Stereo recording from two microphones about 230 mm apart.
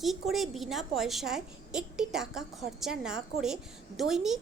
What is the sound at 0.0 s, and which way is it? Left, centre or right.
A woman's voice, centre.